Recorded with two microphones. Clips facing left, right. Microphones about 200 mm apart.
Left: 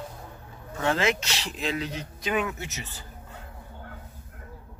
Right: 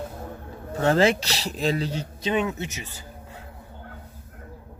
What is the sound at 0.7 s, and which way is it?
Speech, 40° right (ahead or behind).